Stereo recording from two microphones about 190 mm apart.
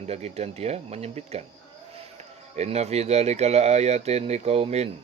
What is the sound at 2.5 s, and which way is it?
Speech, 35° right (ahead or behind).